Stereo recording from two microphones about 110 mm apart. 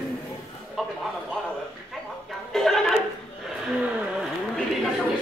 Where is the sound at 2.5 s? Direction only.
5° left (ahead or behind).